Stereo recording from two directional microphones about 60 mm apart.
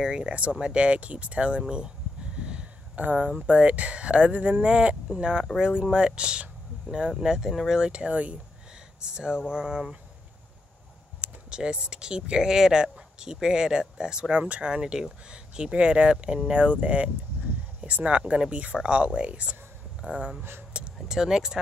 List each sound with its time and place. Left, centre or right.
0.0 s speech: centre
11.1 s speech: centre
20.7 s a sound: centre
21.1 s speech: centre